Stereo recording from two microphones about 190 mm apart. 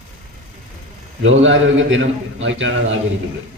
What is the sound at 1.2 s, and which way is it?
A man's voice, 90° right.